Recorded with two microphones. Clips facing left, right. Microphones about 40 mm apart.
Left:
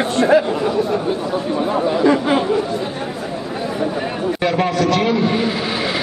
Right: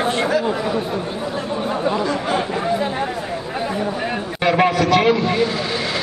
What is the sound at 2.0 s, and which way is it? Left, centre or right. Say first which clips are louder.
Speech: left 6 dB; left.